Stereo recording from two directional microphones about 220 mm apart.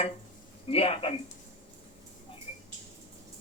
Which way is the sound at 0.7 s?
25° left (ahead or behind).